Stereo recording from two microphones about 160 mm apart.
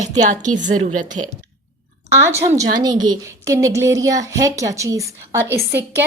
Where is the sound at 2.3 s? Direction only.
20° right (ahead or behind).